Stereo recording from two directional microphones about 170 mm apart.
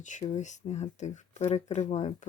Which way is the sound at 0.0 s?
45° left (ahead or behind).